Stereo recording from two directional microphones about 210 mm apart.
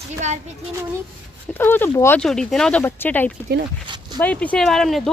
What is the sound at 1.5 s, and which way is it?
Speech, 10° left (ahead or behind).